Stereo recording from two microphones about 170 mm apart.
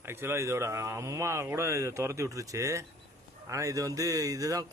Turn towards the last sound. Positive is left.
turn(degrees=-20)  # may be behind; listen again after turning